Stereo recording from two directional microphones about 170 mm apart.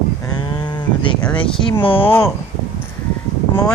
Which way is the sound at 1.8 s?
30° left (ahead or behind).